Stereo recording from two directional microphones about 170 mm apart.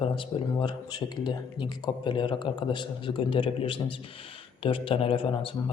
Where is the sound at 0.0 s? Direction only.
30° left (ahead or behind).